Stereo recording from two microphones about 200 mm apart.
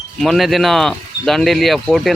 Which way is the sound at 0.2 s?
Centre (ahead or behind).